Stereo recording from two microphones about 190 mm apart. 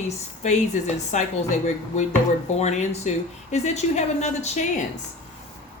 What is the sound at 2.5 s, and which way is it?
A woman's voice, 35° left (ahead or behind).